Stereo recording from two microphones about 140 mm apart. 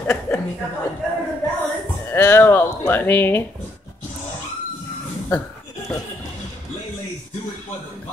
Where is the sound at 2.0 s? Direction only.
15° left (ahead or behind).